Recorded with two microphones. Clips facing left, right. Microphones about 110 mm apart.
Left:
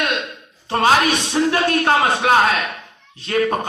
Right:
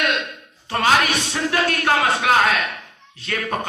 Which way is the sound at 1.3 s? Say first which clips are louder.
Left 4 dB; 30° left (ahead or behind).